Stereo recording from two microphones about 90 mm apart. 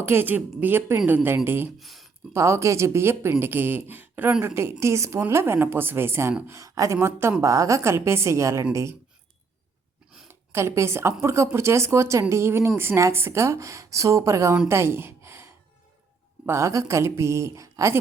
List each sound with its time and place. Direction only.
0.0 s a woman's voice: 25° right (ahead or behind)
1.8 s speech: centre (ahead or behind)
2.3 s a woman's voice: 30° right (ahead or behind)
6.5 s speech: 40° right (ahead or behind)
10.2 s speech: 30° right (ahead or behind)
14.7 s a sound: 30° right (ahead or behind)
16.5 s speech: 30° right (ahead or behind)